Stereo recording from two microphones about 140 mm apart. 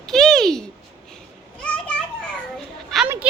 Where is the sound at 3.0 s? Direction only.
15° right (ahead or behind).